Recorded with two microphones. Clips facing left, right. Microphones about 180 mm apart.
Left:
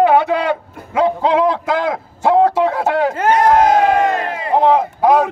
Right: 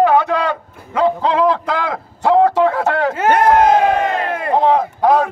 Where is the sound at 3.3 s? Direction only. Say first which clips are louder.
Right 1 dB; 55° right (ahead or behind).